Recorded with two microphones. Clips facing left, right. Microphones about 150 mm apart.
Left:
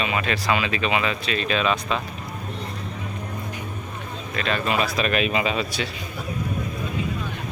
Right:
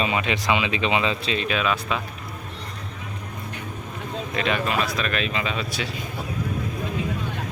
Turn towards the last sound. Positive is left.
turn(degrees=5)  # may be behind; listen again after turning